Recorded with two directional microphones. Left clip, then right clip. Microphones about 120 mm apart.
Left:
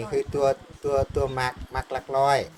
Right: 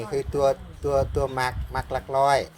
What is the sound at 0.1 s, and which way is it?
Speech, 30° right (ahead or behind).